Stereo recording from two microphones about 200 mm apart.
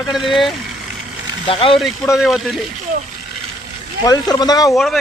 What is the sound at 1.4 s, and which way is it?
Speech, 25° left (ahead or behind).